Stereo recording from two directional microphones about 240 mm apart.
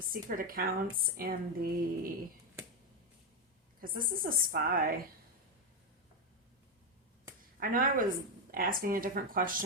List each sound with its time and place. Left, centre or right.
0.1 s a woman's voice: right
3.8 s a woman's voice: right
7.6 s a woman's voice: right